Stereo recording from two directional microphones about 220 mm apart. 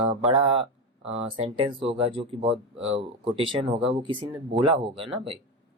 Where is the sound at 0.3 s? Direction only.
25° right (ahead or behind).